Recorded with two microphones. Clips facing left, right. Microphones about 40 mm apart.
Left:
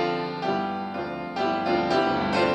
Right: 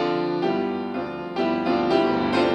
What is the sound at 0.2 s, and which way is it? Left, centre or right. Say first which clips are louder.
Music: right 4 dB; centre.